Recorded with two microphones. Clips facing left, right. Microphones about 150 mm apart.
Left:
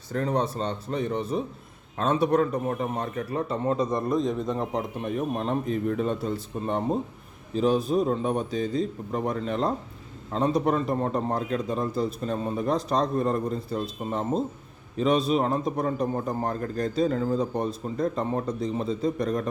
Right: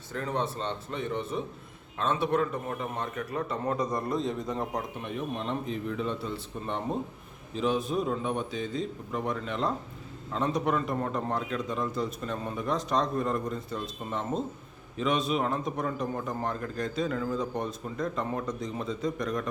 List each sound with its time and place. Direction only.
0.1 s a man's voice: 40° left (ahead or behind); by 4.8 s 20° left (ahead or behind)
5.0 s a man's voice: 45° left (ahead or behind)